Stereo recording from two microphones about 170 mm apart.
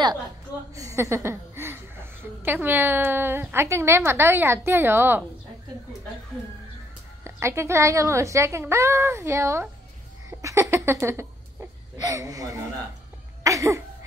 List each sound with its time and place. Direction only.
0.7 s a woman's voice: 15° right (ahead or behind)
7.2 s a woman's voice: 15° right (ahead or behind)
13.4 s a sound: 20° right (ahead or behind)